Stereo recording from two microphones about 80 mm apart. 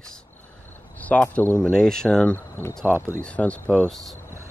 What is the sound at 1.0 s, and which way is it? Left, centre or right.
Speech, centre.